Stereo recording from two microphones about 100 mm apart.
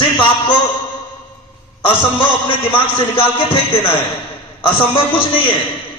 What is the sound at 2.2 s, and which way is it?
A man's voice, 60° left (ahead or behind).